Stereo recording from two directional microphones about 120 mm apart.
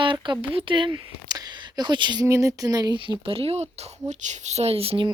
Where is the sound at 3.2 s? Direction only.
50° right (ahead or behind).